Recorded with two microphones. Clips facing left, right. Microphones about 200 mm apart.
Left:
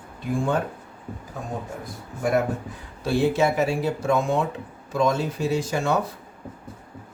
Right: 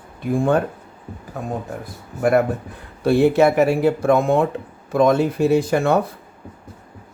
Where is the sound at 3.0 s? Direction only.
60° right (ahead or behind).